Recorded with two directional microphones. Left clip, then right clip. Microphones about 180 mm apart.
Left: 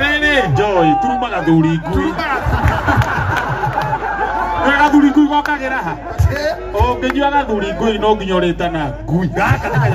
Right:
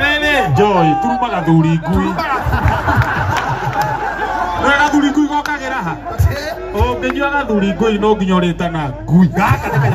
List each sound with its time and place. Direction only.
0.0 s a man's voice: 25° right (ahead or behind)
4.6 s a man's voice: 20° right (ahead or behind)
6.8 s a man's voice: 25° right (ahead or behind)